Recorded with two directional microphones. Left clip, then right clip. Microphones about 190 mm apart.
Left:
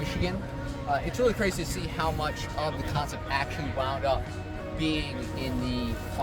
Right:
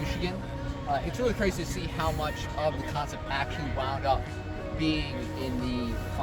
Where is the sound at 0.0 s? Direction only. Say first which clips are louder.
Left 1 dB; centre (ahead or behind).